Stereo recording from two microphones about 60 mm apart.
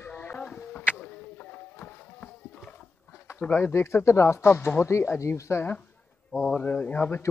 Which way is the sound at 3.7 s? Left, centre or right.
Left.